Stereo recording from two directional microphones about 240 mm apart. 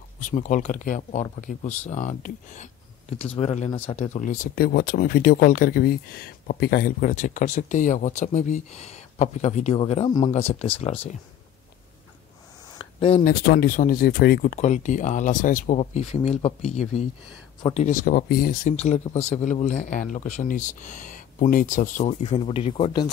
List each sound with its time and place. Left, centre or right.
0.2 s speech: left
12.7 s a sound: left
13.3 s speech: left